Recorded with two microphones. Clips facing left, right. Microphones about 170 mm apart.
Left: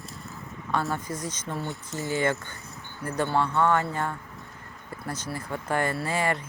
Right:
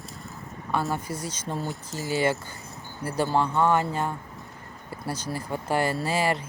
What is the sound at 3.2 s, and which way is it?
Speech, 15° right (ahead or behind).